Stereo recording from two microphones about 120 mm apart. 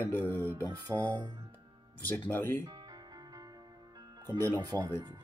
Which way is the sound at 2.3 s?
15° left (ahead or behind).